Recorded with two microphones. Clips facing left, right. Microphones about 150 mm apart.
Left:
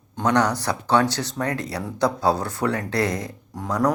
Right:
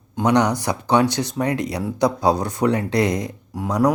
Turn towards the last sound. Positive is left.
turn(degrees=-15)  # may be behind; listen again after turning